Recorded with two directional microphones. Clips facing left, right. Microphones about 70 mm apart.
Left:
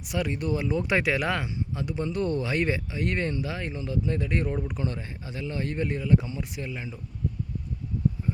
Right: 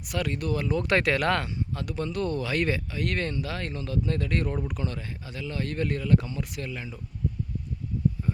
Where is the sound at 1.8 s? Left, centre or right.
Left.